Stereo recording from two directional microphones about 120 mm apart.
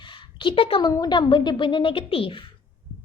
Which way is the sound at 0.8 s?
35° left (ahead or behind).